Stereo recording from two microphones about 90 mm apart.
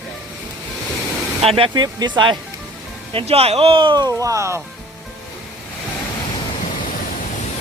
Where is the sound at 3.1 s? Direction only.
90° right.